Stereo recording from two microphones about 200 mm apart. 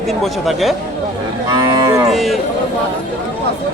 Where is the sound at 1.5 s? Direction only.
20° right (ahead or behind).